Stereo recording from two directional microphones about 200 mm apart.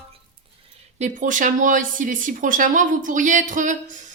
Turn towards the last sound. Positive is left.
turn(degrees=-40)  # may be behind; listen again after turning